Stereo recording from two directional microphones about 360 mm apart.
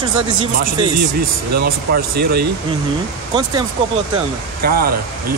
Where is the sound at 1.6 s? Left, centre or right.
Right.